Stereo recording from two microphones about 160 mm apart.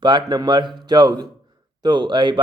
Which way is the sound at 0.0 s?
30° right (ahead or behind).